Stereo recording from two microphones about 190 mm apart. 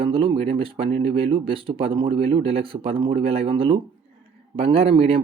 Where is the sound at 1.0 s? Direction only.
30° right (ahead or behind).